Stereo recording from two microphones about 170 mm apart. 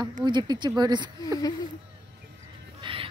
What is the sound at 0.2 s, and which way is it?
Speech, 25° right (ahead or behind).